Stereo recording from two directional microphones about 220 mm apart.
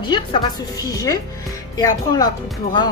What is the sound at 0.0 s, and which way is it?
Speech, 20° left (ahead or behind).